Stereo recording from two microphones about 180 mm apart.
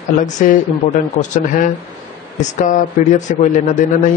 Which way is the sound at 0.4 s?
45° left (ahead or behind).